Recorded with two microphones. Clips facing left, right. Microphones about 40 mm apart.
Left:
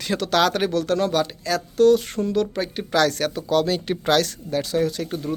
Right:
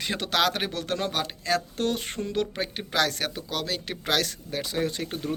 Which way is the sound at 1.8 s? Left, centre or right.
Right.